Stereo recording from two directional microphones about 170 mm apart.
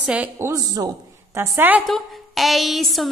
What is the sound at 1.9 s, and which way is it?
A woman's voice, centre (ahead or behind).